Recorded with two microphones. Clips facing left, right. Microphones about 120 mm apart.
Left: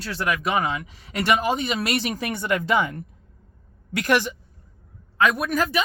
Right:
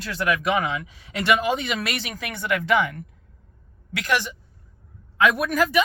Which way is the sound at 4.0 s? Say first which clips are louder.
Left 3 dB; 50° left (ahead or behind).